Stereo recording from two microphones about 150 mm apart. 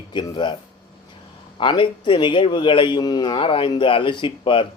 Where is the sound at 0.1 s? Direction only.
30° left (ahead or behind).